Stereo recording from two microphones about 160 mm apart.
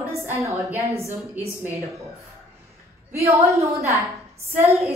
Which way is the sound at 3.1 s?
20° right (ahead or behind).